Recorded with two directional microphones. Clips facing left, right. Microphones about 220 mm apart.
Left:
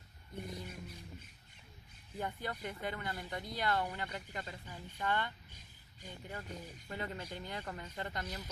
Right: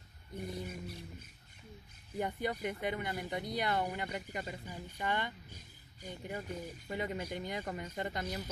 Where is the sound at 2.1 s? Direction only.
15° right (ahead or behind).